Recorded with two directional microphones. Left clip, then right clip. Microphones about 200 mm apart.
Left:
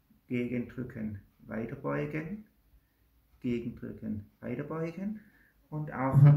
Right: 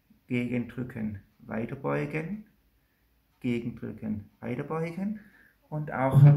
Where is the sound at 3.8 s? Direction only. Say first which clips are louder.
Right 4 dB; 40° right (ahead or behind).